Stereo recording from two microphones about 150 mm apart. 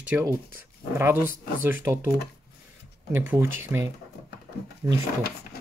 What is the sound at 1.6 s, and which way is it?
Speech, 15° right (ahead or behind).